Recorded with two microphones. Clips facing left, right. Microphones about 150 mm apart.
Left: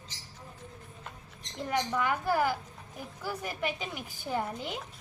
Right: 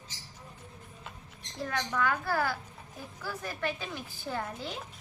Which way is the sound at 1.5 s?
20° left (ahead or behind).